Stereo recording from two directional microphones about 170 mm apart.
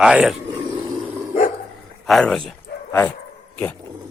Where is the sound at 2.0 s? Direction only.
Centre (ahead or behind).